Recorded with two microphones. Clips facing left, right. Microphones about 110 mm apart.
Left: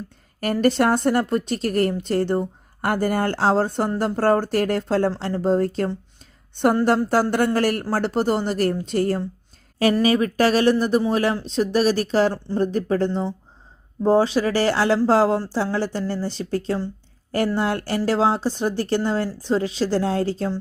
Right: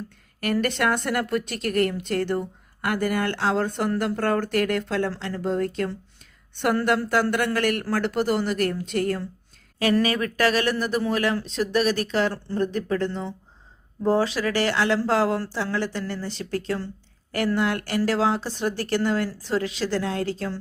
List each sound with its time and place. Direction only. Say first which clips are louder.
0.3 s a woman's voice: left 5 dB; 35° left (ahead or behind)
7.1 s a woman's voice: left 3 dB; 35° left (ahead or behind)